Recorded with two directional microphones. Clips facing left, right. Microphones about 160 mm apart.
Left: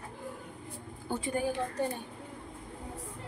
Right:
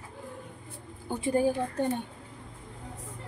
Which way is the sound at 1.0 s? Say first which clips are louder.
Right 4 dB; 15° right (ahead or behind).